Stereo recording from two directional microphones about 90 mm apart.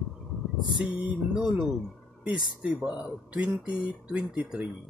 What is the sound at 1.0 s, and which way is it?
Speech, 10° right (ahead or behind).